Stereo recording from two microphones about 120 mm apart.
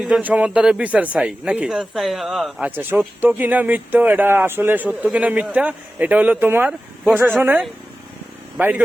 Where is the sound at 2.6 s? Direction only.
15° right (ahead or behind).